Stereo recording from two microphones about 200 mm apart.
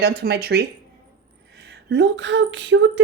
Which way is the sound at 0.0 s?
55° right (ahead or behind).